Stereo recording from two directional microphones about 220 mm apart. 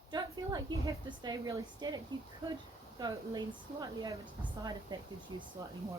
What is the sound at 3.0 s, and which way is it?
Speech, 15° right (ahead or behind).